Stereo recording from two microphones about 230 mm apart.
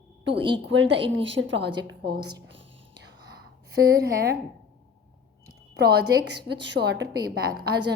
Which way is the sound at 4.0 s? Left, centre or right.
Right.